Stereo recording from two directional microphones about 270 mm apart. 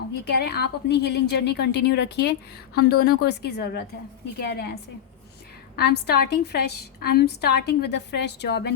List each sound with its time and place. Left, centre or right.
0.3 s a woman's voice: left
5.7 s a woman's voice: left